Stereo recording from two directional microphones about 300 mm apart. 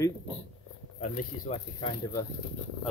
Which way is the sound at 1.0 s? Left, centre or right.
Left.